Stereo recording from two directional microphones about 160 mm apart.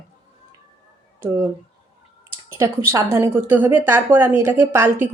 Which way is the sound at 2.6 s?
20° right (ahead or behind).